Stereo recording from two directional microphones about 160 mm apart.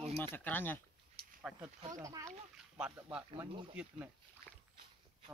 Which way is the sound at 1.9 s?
20° right (ahead or behind).